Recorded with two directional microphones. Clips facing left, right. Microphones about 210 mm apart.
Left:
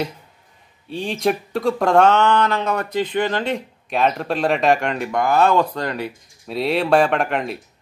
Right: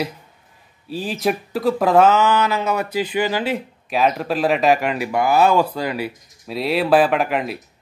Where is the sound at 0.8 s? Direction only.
5° right (ahead or behind).